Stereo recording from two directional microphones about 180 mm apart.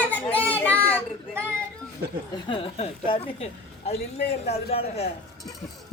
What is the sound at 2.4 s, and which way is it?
Speech, 30° left (ahead or behind).